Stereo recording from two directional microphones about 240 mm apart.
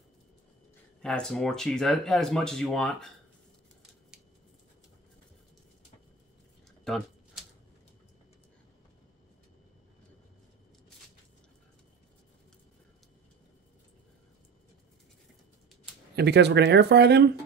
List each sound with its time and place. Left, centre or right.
1.0 s speech: centre
6.8 s a sound: centre
16.2 s speech: right